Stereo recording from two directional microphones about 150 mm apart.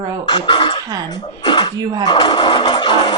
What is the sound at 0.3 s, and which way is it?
Speech, 30° left (ahead or behind).